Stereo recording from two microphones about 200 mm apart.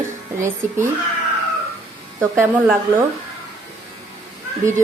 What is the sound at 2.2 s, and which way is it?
Speech, 10° right (ahead or behind).